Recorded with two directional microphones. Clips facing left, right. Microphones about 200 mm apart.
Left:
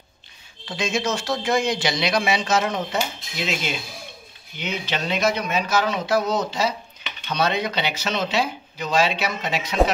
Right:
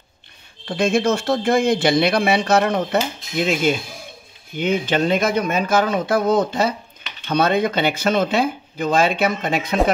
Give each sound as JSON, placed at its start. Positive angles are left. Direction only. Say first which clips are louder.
{"t": 0.7, "sound": "speech", "louder": "right 7 dB", "side_deg": -55}